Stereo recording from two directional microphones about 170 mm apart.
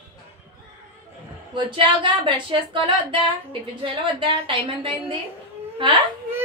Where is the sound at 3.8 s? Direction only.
30° right (ahead or behind).